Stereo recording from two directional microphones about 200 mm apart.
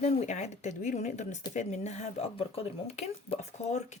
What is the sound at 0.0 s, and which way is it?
Speech, 35° left (ahead or behind).